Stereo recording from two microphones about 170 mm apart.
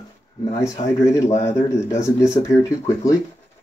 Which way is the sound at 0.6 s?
20° left (ahead or behind).